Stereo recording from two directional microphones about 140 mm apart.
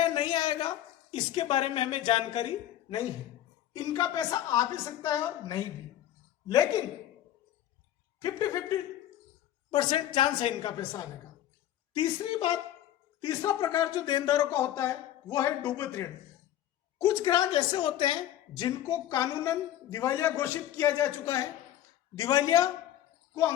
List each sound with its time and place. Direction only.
0.1 s a sound: 35° left (ahead or behind)
1.1 s a woman's voice: 35° left (ahead or behind)
3.8 s speech: 25° left (ahead or behind)
8.2 s speech: 25° left (ahead or behind)
9.7 s a woman's voice: 35° left (ahead or behind)
13.2 s a woman's voice: 25° left (ahead or behind)